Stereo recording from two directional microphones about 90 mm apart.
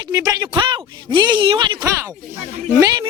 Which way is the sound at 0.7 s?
60° right (ahead or behind).